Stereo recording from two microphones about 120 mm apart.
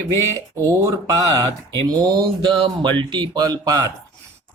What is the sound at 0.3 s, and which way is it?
Speech, 25° right (ahead or behind).